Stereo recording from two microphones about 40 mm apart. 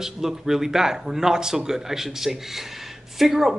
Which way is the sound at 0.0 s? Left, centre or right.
Centre.